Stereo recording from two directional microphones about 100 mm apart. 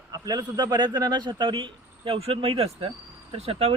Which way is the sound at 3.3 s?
75° right (ahead or behind).